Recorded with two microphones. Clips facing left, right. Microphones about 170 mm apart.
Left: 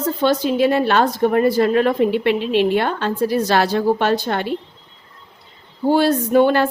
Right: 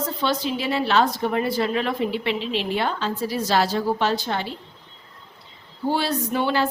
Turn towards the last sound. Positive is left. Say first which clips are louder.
# left 8 dB
turn(degrees=55)  # may be behind; listen again after turning